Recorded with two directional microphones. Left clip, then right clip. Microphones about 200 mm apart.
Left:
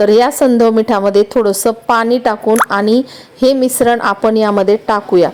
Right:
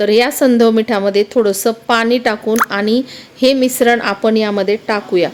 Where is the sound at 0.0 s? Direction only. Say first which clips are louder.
Left 3 dB; 15° left (ahead or behind).